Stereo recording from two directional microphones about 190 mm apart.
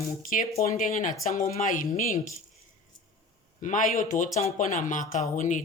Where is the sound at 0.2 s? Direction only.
45° left (ahead or behind).